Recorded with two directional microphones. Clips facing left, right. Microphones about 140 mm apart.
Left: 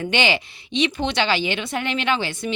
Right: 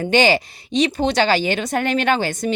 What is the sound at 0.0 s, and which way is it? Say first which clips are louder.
Speech: right 6 dB; 40° right (ahead or behind).